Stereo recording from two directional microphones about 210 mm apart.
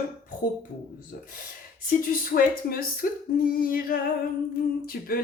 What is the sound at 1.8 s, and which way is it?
Speech, 40° left (ahead or behind).